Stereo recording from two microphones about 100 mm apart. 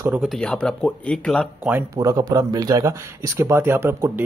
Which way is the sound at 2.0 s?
35° right (ahead or behind).